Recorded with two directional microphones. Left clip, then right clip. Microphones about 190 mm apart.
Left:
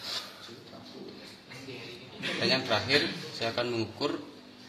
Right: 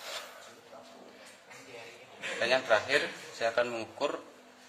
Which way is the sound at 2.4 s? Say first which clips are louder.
Right 2 dB; 45° right (ahead or behind).